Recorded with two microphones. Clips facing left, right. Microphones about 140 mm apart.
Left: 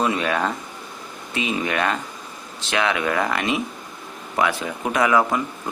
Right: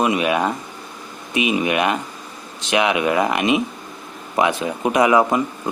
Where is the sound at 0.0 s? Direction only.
15° right (ahead or behind).